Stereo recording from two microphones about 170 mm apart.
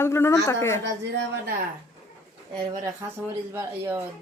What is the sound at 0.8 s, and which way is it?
Speech, 90° right.